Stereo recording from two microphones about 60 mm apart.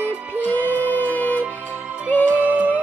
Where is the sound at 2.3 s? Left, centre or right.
Right.